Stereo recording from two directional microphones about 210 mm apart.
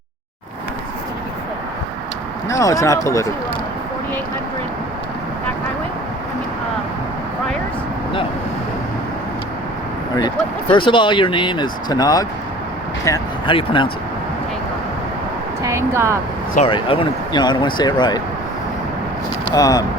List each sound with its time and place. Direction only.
2.5 s speech: 15° left (ahead or behind)
10.2 s speech: 20° left (ahead or behind)
15.6 s speech: 15° right (ahead or behind)
16.6 s speech: 25° left (ahead or behind)
19.5 s speech: 15° left (ahead or behind)